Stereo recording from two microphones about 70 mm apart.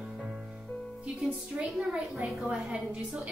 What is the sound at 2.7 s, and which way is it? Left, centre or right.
Speech, centre.